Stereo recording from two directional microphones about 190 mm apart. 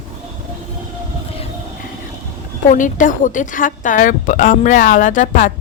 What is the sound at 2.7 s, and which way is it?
A woman's voice, 45° left (ahead or behind).